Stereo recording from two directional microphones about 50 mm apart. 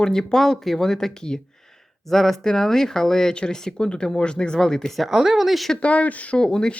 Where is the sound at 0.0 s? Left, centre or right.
Centre.